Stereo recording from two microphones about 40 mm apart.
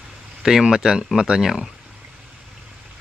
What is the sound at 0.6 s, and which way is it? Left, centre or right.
Speech, centre.